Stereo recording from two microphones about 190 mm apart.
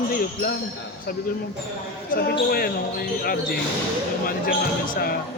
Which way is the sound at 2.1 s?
55° left (ahead or behind).